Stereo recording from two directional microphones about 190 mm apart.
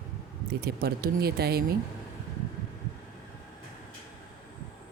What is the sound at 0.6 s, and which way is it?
Speech, 55° right (ahead or behind).